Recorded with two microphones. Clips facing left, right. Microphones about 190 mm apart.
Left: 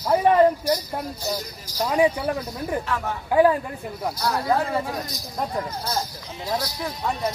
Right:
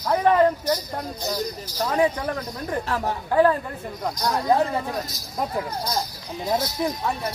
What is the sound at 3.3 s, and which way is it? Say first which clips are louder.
Speech: left 1 dB; 10° left (ahead or behind).